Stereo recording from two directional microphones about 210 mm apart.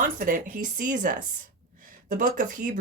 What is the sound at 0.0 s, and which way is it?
Speech, 40° right (ahead or behind).